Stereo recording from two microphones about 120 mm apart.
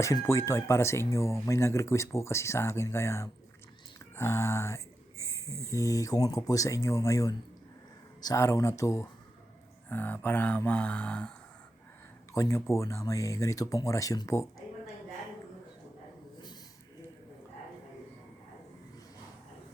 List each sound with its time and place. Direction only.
0.0 s speech: 25° left (ahead or behind)
9.9 s speech: 15° left (ahead or behind)
12.3 s speech: 25° left (ahead or behind)